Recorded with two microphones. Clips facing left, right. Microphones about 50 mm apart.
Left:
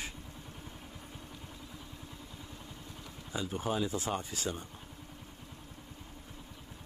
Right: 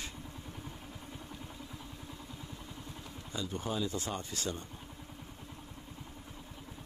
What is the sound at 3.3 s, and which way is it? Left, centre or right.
Speech, centre.